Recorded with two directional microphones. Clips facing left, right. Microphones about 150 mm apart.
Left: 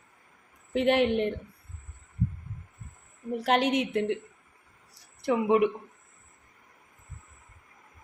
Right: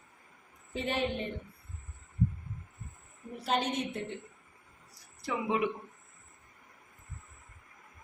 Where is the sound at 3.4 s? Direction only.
90° left.